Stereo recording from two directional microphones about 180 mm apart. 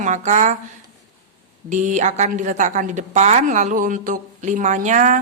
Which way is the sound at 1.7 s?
40° right (ahead or behind).